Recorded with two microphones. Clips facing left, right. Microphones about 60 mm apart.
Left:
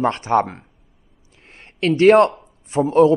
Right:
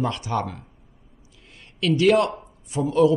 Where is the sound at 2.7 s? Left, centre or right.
Left.